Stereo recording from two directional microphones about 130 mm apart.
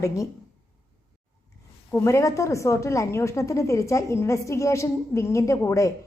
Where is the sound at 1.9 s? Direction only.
20° left (ahead or behind).